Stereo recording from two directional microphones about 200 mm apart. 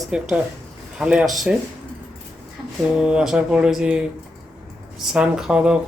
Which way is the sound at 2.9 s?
5° right (ahead or behind).